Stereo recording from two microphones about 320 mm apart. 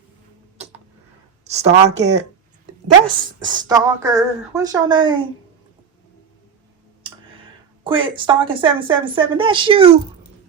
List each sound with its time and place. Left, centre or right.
1.5 s speech: right
3.4 s speech: centre
7.9 s speech: centre